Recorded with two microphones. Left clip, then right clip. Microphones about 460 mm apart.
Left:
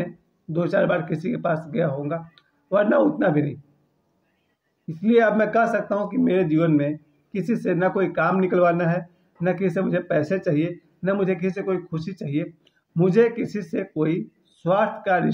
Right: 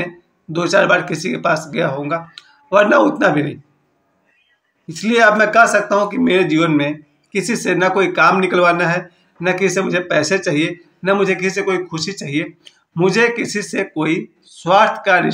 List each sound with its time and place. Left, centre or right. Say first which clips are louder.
0.0 s speech: right 6 dB; left
4.8 s speech: right 6 dB; left